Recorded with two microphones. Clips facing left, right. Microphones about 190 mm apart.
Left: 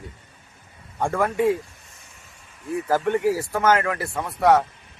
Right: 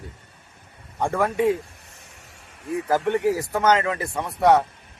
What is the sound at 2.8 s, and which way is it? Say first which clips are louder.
Speech: even; 15° right (ahead or behind).